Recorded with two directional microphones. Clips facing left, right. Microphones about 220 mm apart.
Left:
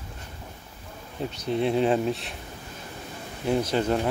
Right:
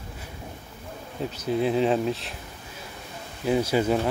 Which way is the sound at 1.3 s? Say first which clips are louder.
Right 1 dB; 5° right (ahead or behind).